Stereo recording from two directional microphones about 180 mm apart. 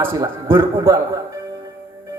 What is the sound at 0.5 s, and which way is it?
Speech, 15° right (ahead or behind).